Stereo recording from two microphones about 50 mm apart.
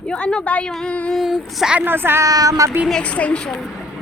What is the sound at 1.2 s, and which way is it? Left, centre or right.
Speech, centre.